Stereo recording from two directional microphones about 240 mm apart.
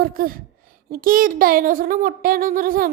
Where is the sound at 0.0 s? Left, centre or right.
Right.